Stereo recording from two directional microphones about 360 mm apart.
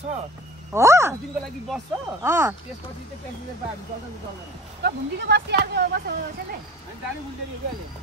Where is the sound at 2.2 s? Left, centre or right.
Centre.